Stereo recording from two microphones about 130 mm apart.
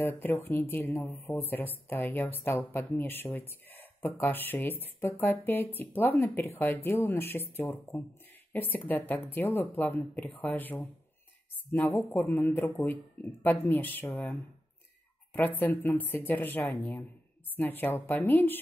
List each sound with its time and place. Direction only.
0.0 s speech: 15° left (ahead or behind)